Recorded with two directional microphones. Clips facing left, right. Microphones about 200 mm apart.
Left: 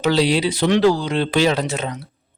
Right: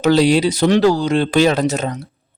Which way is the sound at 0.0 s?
45° right (ahead or behind).